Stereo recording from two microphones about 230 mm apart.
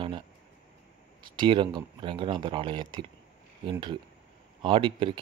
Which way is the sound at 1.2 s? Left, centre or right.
Right.